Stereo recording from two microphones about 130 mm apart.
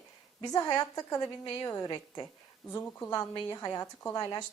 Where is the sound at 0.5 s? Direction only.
30° left (ahead or behind).